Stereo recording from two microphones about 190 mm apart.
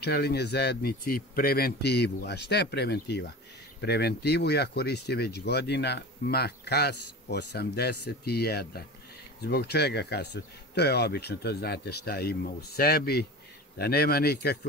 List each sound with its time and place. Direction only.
0.0 s speech: 55° left (ahead or behind)